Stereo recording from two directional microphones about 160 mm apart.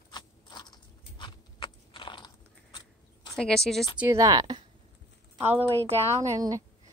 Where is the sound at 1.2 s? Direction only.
30° left (ahead or behind).